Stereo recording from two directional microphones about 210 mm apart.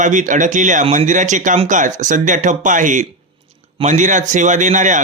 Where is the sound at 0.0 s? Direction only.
35° right (ahead or behind).